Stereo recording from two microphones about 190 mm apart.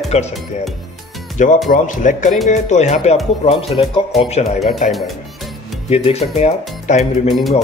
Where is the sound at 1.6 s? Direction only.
45° left (ahead or behind).